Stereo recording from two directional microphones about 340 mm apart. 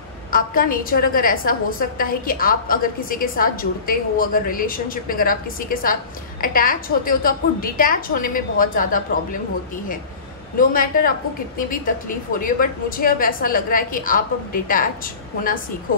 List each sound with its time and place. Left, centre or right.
0.3 s a woman's voice: left
10.7 s a woman's voice: left